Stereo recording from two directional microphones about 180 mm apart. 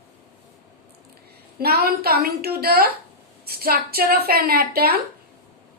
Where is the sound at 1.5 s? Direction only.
60° right (ahead or behind).